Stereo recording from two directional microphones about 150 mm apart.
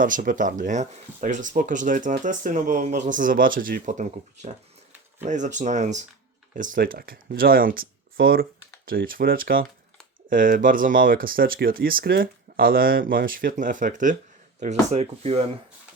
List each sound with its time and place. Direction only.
0.0 s speech: 65° right (ahead or behind); by 8.4 s 90° right
8.9 s speech: 75° right (ahead or behind); by 15.4 s 45° right (ahead or behind)